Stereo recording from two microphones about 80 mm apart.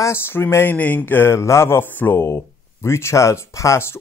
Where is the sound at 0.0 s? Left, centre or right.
Left.